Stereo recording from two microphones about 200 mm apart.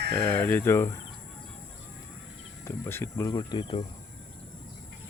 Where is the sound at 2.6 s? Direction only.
10° left (ahead or behind).